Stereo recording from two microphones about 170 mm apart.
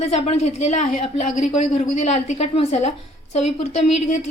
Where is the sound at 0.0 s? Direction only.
40° left (ahead or behind).